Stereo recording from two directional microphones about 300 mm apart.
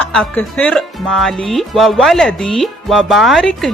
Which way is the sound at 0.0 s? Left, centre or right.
Centre.